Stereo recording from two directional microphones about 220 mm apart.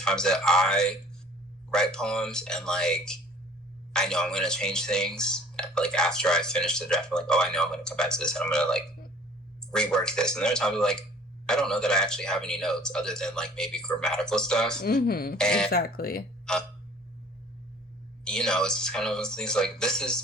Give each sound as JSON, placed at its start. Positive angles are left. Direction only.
{"t": 0.0, "sound": "speech", "side_deg": 5}
{"t": 15.0, "sound": "speech", "side_deg": 45}
{"t": 15.4, "sound": "speech", "side_deg": 5}
{"t": 15.7, "sound": "speech", "side_deg": 45}
{"t": 16.5, "sound": "speech", "side_deg": 5}
{"t": 18.3, "sound": "speech", "side_deg": 5}